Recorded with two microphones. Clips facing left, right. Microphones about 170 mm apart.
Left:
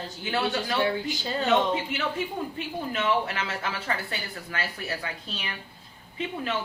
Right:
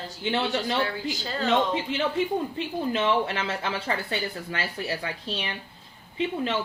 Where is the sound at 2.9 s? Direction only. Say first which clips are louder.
Right 1 dB; 30° right (ahead or behind).